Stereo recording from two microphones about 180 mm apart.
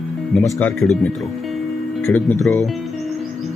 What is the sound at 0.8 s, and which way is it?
Speech, centre (ahead or behind).